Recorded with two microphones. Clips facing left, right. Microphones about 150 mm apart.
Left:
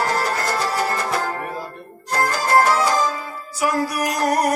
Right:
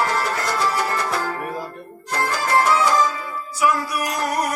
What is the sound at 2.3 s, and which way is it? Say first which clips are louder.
Music: left 1 dB; 40° left (ahead or behind).